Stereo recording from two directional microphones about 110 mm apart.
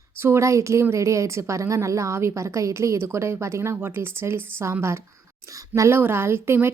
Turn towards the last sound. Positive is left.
turn(degrees=-20)  # may be behind; listen again after turning